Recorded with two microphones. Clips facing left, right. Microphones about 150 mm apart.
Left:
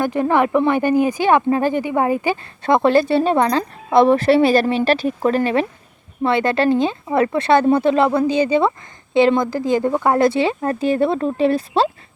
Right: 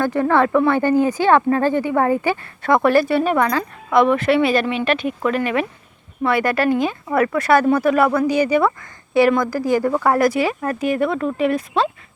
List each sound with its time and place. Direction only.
0.0 s speech: 15° left (ahead or behind)